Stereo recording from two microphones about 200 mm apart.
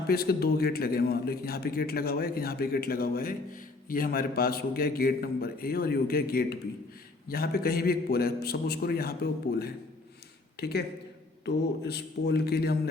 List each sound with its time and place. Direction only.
0.1 s a man's voice: 50° left (ahead or behind)
10.6 s a man's voice: 50° left (ahead or behind)